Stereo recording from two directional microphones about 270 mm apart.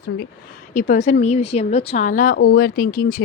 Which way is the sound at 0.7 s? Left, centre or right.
Left.